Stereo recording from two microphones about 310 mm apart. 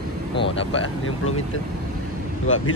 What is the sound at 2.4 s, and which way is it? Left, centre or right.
Speech, left.